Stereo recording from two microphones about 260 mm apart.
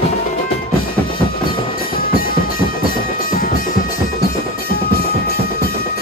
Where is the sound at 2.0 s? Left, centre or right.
Left.